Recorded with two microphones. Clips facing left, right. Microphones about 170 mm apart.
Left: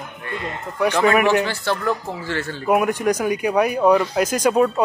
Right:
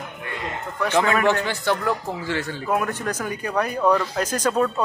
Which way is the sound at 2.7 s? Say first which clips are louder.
Left 7 dB; 15° left (ahead or behind).